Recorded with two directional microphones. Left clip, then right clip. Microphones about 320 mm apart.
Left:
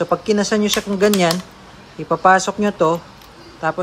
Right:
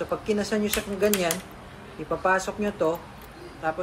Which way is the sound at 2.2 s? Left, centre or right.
Left.